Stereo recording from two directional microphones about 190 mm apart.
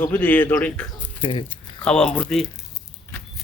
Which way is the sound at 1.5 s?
5° left (ahead or behind).